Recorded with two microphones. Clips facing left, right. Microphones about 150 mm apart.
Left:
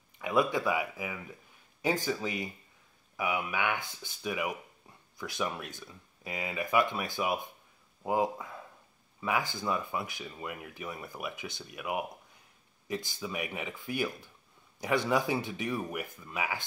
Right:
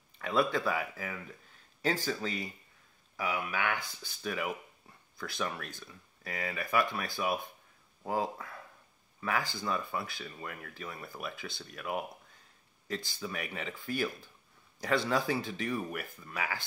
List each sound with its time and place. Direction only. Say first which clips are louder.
0.2 s speech: left 1 dB; 15° left (ahead or behind)